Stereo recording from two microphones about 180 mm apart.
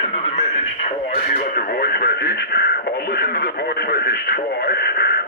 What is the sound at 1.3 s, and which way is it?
Speech, 55° left (ahead or behind).